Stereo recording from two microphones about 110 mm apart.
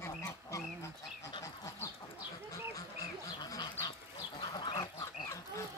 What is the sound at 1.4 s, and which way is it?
Bird, 30° left (ahead or behind).